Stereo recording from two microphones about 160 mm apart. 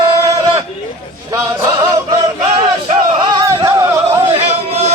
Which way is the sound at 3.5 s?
20° right (ahead or behind).